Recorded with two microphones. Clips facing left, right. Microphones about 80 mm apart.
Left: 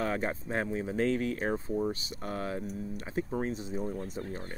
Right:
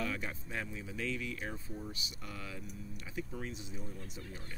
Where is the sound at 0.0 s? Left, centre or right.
Left.